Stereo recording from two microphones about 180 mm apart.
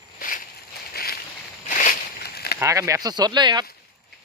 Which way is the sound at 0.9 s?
55° left (ahead or behind).